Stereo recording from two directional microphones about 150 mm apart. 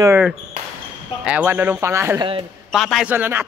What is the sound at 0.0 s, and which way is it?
Speech, 15° right (ahead or behind).